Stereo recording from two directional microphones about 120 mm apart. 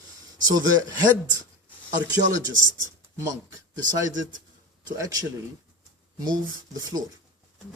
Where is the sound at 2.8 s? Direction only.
25° right (ahead or behind).